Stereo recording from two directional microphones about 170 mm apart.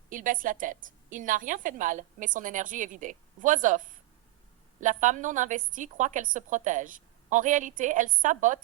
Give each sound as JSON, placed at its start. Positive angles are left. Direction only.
{"t": 0.1, "sound": "a woman's voice", "side_deg": -50}